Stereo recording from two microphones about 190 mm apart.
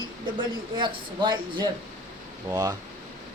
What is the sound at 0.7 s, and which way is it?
Speech, 25° right (ahead or behind).